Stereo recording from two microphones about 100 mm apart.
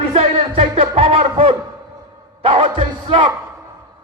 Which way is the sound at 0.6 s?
65° right (ahead or behind).